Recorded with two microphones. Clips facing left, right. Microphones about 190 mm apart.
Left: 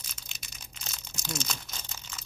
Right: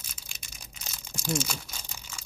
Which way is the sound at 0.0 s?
10° right (ahead or behind).